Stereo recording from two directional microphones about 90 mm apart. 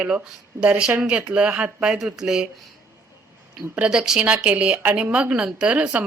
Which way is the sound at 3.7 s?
10° right (ahead or behind).